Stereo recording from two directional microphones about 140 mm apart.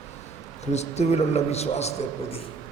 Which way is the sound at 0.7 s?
50° left (ahead or behind).